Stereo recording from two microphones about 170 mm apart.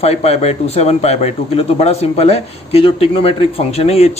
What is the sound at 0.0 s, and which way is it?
Speech, 40° left (ahead or behind).